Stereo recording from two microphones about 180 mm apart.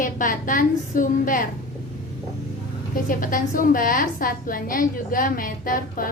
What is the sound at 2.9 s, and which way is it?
A woman's voice, 50° left (ahead or behind).